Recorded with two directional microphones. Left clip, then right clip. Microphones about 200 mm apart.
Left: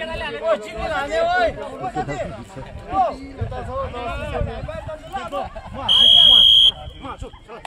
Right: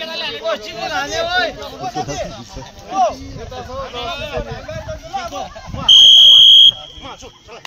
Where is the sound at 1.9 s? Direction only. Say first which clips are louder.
Right 3 dB; 50° right (ahead or behind).